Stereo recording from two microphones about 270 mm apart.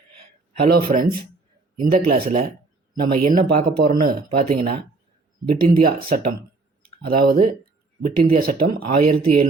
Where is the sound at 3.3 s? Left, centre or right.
Right.